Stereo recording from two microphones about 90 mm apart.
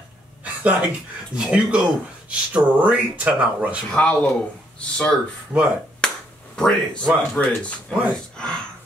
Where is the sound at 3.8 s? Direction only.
10° left (ahead or behind).